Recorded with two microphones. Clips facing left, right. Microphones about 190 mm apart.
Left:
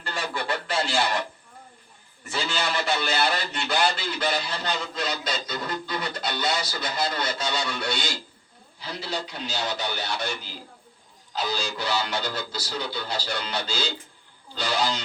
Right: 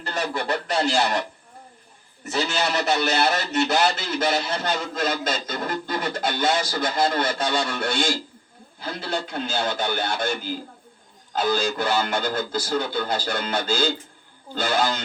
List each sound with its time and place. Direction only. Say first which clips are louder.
0.1 s goose: right 4 dB; 40° right (ahead or behind)
2.2 s speech: right 4 dB; 40° right (ahead or behind)